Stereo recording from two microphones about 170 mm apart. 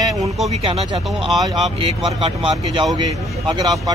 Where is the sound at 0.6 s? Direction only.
35° right (ahead or behind).